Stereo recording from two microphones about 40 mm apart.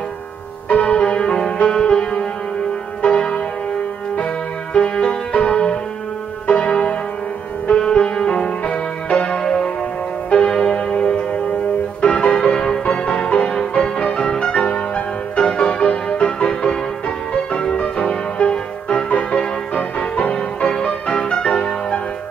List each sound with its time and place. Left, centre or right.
0.7 s music: left
4.7 s music: left
9.4 s music: left
10.3 s church bell: centre
12.0 s music: left